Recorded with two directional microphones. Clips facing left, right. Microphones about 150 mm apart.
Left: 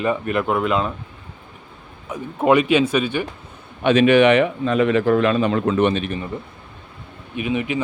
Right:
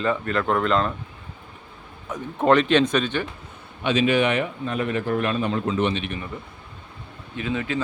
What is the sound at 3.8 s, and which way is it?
A man's voice, 60° left (ahead or behind).